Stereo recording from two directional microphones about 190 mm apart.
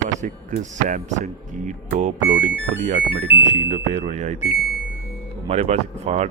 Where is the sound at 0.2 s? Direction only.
40° right (ahead or behind).